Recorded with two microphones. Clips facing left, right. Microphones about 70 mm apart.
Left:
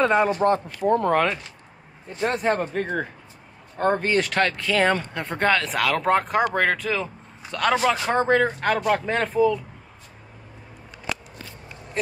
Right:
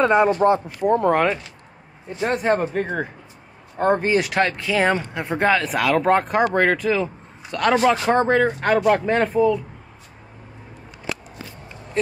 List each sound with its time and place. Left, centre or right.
0.0 s speech: centre